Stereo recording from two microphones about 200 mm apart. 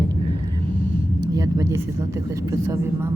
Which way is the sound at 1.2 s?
20° right (ahead or behind).